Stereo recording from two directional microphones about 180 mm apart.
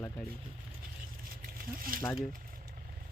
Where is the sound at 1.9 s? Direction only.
50° right (ahead or behind).